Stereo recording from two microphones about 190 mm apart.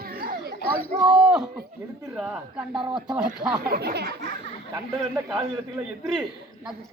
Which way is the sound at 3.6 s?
55° right (ahead or behind).